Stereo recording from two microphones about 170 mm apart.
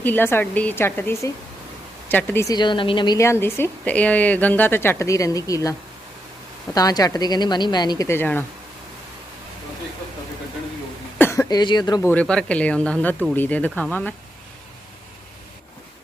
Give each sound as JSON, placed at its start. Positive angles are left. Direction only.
{"t": 0.0, "sound": "a woman's voice", "side_deg": 10}
{"t": 6.7, "sound": "speech", "side_deg": 20}
{"t": 11.2, "sound": "speech", "side_deg": 15}
{"t": 12.1, "sound": "a woman's voice", "side_deg": 5}